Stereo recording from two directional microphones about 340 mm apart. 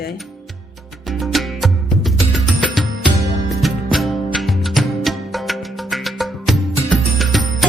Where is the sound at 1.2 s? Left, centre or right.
Centre.